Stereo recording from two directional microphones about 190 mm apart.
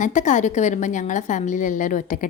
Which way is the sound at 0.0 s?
40° left (ahead or behind).